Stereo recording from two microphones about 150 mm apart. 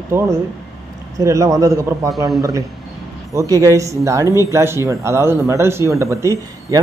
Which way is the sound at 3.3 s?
20° right (ahead or behind).